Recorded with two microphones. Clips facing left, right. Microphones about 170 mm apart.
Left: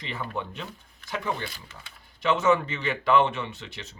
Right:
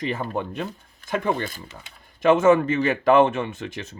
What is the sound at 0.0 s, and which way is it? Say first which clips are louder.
Speech: right 7 dB; 45° right (ahead or behind).